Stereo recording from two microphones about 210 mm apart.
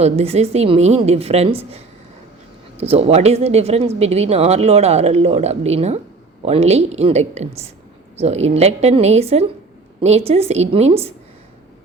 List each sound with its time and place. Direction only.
0.0 s a woman's voice: 30° right (ahead or behind)